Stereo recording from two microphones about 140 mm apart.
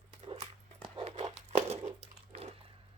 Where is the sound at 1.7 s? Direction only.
50° right (ahead or behind).